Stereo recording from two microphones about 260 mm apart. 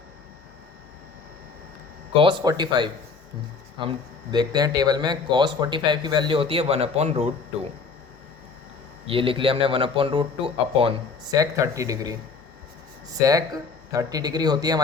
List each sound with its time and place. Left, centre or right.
2.1 s a man's voice: centre
9.0 s a man's voice: right
13.1 s a man's voice: centre